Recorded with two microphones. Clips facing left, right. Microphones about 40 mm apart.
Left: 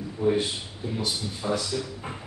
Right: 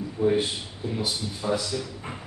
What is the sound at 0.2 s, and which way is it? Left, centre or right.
Speech, centre.